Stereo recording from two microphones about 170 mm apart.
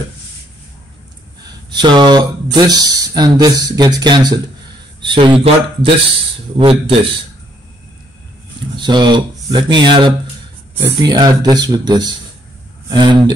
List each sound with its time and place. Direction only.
1.4 s a sound: 25° right (ahead or behind)
2.5 s a man's voice: 25° right (ahead or behind)
8.7 s speech: 25° right (ahead or behind)